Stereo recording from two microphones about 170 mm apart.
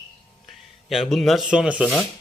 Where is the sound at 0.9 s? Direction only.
Centre (ahead or behind).